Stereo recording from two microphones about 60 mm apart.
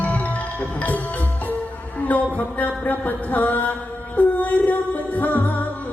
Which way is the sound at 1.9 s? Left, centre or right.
Left.